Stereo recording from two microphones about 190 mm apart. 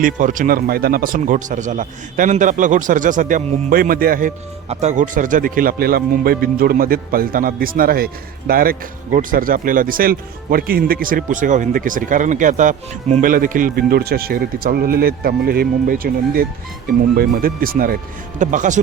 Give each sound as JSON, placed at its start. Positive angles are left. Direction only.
{"t": 0.0, "sound": "speech", "side_deg": -45}
{"t": 4.7, "sound": "speech", "side_deg": -35}